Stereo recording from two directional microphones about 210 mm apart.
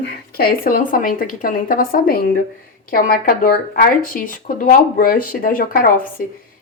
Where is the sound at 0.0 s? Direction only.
45° left (ahead or behind).